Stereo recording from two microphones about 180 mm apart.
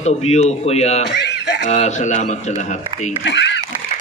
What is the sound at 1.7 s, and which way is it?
A man's voice, 40° left (ahead or behind).